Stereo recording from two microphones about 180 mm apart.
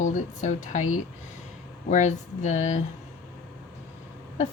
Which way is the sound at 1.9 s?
40° left (ahead or behind).